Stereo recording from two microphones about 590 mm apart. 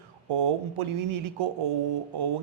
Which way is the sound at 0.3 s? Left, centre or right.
Right.